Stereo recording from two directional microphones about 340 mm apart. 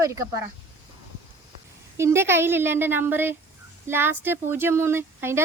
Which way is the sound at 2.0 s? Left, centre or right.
Centre.